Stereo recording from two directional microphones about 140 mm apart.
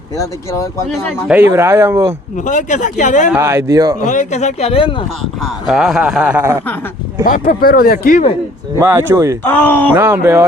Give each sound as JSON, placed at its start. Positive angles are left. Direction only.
{"t": 1.3, "sound": "speech", "side_deg": -15}
{"t": 2.4, "sound": "speech", "side_deg": 60}
{"t": 3.3, "sound": "speech", "side_deg": -20}
{"t": 4.0, "sound": "speech", "side_deg": 60}
{"t": 5.4, "sound": "speech", "side_deg": 0}
{"t": 7.3, "sound": "speech", "side_deg": 75}
{"t": 8.8, "sound": "speech", "side_deg": -15}
{"t": 9.4, "sound": "speech", "side_deg": 15}
{"t": 9.9, "sound": "speech", "side_deg": -15}